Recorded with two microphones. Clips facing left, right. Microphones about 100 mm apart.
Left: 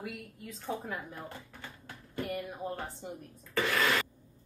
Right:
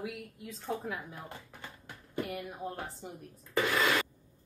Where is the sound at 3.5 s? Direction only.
15° right (ahead or behind).